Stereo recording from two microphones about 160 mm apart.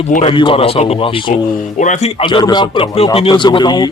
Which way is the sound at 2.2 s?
30° left (ahead or behind).